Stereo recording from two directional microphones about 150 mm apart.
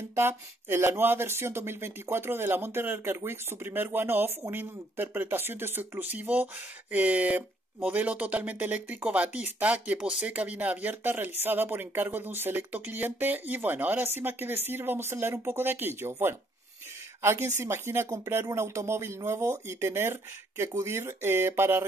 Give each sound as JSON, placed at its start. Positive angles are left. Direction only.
{"t": 0.1, "sound": "speech", "side_deg": -15}